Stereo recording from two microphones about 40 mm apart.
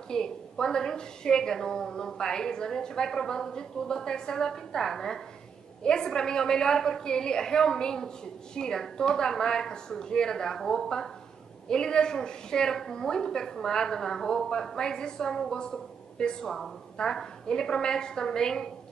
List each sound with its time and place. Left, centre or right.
0.1 s a woman's voice: centre